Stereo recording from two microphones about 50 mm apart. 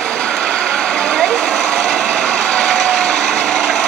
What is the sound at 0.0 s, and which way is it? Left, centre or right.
Vehicle, centre.